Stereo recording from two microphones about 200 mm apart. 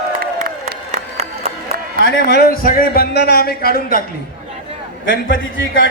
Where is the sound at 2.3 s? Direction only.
50° left (ahead or behind).